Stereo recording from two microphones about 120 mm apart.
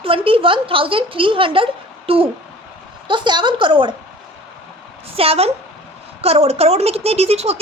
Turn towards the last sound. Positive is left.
turn(degrees=-60)  # may be behind; listen again after turning